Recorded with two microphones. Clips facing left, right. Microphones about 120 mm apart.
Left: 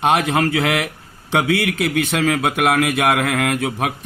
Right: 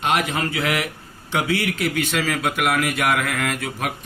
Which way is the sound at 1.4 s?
90° left.